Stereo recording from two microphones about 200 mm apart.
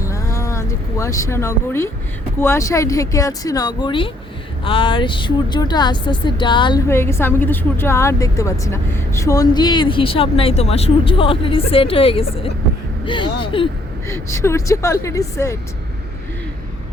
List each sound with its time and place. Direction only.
0.0 s a sound: 15° left (ahead or behind)
2.4 s a woman's voice: 15° left (ahead or behind)
6.8 s a woman's voice: 10° left (ahead or behind)
14.1 s speech: 15° left (ahead or behind)